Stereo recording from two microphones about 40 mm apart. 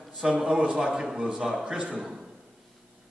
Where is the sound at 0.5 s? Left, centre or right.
Right.